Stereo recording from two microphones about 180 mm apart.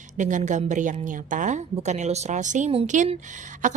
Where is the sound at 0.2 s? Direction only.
45° right (ahead or behind).